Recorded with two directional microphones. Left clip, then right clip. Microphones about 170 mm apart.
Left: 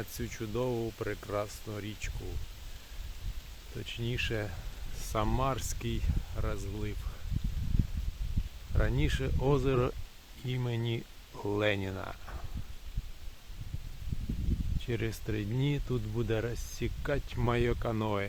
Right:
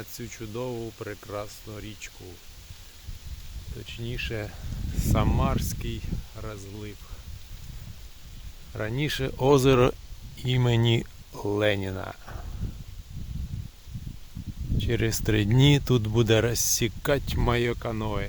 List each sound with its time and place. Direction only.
0.0 s speech: 5° right (ahead or behind)
3.8 s speech: 10° right (ahead or behind)
4.9 s speech: 30° right (ahead or behind)
5.5 s speech: 10° right (ahead or behind)
6.3 s speech: centre (ahead or behind)
8.7 s speech: 35° right (ahead or behind)
9.2 s speech: 90° right
10.4 s speech: 55° right (ahead or behind)
11.3 s speech: 30° right (ahead or behind)
14.8 s speech: 40° right (ahead or behind)
15.3 s speech: 70° right (ahead or behind)
17.6 s speech: 40° right (ahead or behind)
17.8 s speech: 20° right (ahead or behind)